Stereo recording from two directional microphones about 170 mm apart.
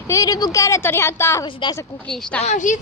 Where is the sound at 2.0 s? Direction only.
5° left (ahead or behind).